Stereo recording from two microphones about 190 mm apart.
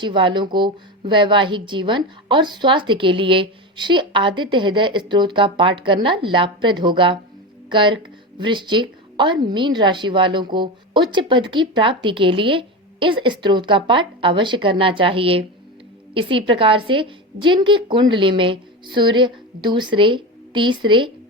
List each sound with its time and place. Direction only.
0.0 s speech: 25° right (ahead or behind)